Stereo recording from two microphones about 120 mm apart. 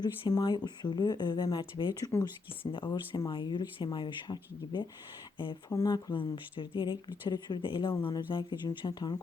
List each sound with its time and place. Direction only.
0.0 s speech: 35° left (ahead or behind)
2.7 s speech: 45° left (ahead or behind)
5.7 s speech: 35° left (ahead or behind)